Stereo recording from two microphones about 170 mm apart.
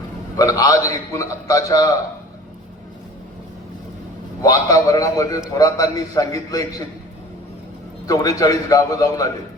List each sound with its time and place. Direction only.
0.3 s a man's voice: 20° left (ahead or behind)
4.4 s a man's voice: 20° left (ahead or behind)
8.0 s a man's voice: 20° left (ahead or behind)